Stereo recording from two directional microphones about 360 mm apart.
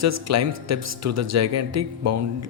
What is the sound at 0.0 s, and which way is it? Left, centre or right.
Speech, right.